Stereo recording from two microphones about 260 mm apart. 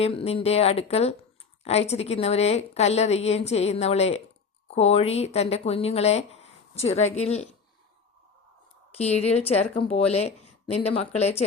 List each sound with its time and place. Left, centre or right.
0.0 s a woman's voice: left
8.9 s a woman's voice: left